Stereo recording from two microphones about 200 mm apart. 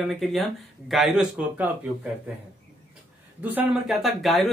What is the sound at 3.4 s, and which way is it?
Speech, 5° right (ahead or behind).